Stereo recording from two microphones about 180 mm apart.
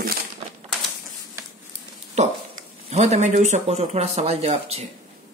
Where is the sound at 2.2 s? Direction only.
40° right (ahead or behind).